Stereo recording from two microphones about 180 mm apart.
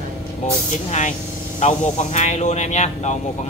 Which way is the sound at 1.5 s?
40° left (ahead or behind).